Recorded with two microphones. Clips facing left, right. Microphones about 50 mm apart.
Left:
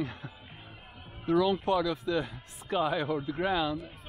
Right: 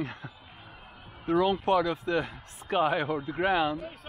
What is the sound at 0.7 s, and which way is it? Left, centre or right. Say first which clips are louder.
Music: right 1 dB; centre.